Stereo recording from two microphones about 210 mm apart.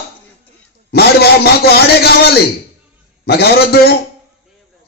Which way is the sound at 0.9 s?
50° left (ahead or behind).